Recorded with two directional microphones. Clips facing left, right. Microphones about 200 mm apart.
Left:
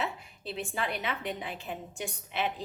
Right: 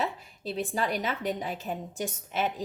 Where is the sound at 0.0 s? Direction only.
40° right (ahead or behind).